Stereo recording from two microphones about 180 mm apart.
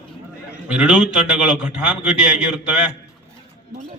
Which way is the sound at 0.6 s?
5° right (ahead or behind).